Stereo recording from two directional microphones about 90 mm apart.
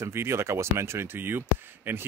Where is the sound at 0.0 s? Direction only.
30° right (ahead or behind).